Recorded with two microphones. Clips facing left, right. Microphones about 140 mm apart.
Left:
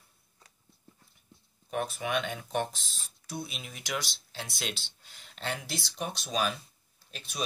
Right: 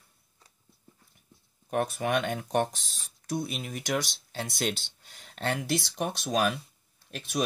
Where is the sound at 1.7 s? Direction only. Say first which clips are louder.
Right 4 dB; 55° right (ahead or behind).